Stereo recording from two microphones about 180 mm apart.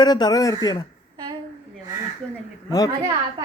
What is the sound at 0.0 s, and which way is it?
Speech, 20° left (ahead or behind).